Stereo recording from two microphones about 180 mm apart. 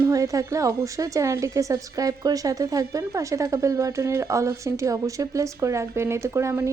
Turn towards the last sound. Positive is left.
turn(degrees=-15)  # may be behind; listen again after turning